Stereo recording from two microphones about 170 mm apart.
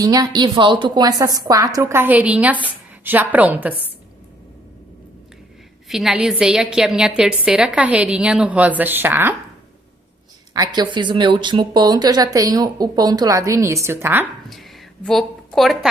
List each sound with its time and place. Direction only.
0.0 s a woman's voice: 20° right (ahead or behind)
5.9 s a woman's voice: centre (ahead or behind)
10.5 s a woman's voice: 25° right (ahead or behind)
14.5 s a sound: centre (ahead or behind)